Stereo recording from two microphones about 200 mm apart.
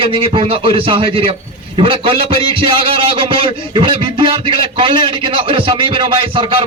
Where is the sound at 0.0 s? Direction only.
25° right (ahead or behind).